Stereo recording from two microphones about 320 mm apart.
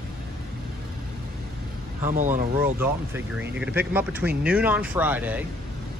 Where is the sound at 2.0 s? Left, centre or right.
Right.